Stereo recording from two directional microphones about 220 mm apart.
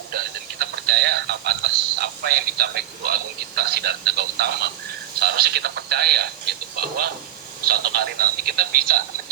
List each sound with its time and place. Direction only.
0.6 s speech: 50° right (ahead or behind)